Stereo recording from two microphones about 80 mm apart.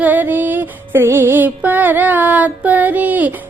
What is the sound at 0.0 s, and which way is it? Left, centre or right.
Music, right.